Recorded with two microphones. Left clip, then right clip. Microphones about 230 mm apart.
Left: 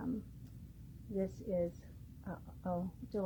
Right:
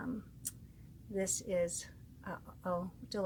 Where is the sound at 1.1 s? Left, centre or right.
Right.